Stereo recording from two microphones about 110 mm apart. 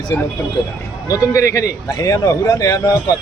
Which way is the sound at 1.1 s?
30° left (ahead or behind).